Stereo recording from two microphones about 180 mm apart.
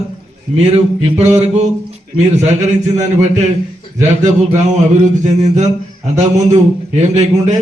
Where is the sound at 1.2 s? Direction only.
40° right (ahead or behind).